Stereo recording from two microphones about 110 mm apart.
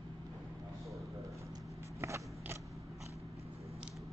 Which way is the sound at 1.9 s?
25° right (ahead or behind).